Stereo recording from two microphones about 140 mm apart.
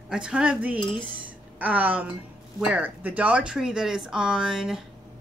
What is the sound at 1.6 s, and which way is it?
Speech, 10° right (ahead or behind).